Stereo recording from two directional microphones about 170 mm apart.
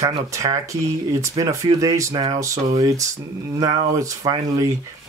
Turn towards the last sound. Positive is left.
turn(degrees=-20)  # may be behind; listen again after turning